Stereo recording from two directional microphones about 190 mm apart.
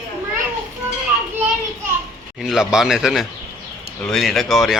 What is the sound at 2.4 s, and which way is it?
Speech, centre (ahead or behind).